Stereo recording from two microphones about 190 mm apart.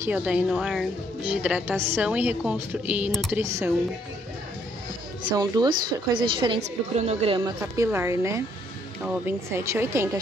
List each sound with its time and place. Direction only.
0.0 s a woman's voice: 5° right (ahead or behind)
3.3 s a woman's voice: 15° right (ahead or behind)
5.3 s a woman's voice: 20° right (ahead or behind)